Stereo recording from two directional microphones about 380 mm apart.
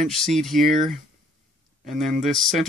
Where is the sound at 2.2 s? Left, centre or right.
Centre.